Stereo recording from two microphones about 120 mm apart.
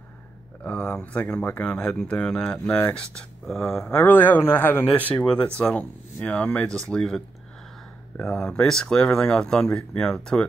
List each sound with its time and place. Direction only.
0.7 s speech: 10° left (ahead or behind)